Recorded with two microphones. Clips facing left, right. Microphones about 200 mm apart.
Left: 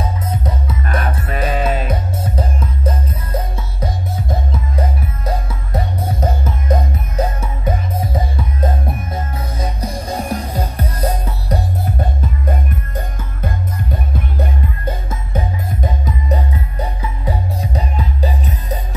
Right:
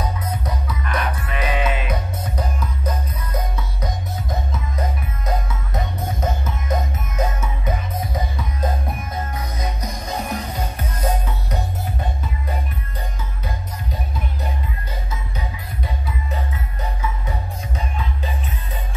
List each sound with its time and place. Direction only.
0.0 s music: 25° left (ahead or behind)
0.8 s music: 45° left (ahead or behind)
17.0 s music: 35° left (ahead or behind)